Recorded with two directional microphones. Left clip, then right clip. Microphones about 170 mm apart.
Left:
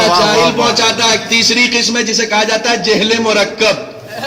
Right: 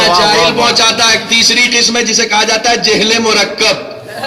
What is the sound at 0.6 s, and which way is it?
Speech, 30° right (ahead or behind).